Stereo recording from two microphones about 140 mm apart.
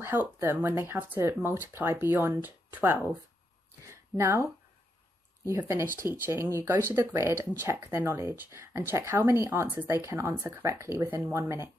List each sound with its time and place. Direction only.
0.0 s speech: 15° right (ahead or behind)
3.8 s a sound: 20° right (ahead or behind)
5.4 s speech: 20° right (ahead or behind)